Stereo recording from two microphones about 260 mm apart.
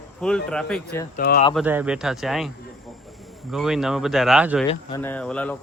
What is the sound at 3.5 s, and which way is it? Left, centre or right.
Speech, centre.